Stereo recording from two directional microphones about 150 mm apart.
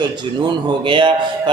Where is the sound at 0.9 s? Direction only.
35° right (ahead or behind).